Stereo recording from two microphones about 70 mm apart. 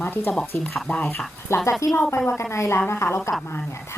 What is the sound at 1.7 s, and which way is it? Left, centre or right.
A woman's voice, left.